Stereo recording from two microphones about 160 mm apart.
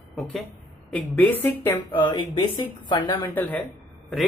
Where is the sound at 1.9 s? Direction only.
30° left (ahead or behind).